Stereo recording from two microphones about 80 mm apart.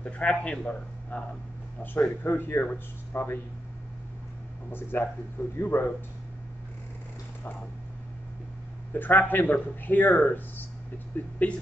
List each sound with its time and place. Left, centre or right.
0.0 s a man's voice: centre
4.6 s speech: left
8.9 s a man's voice: left